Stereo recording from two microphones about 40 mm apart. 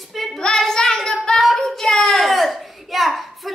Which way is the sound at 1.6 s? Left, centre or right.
Centre.